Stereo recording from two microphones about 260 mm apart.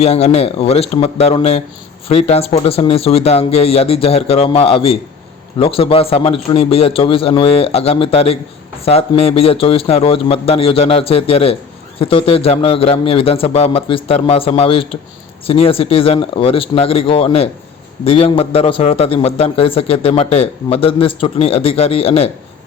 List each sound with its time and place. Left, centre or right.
0.0 s a man's voice: left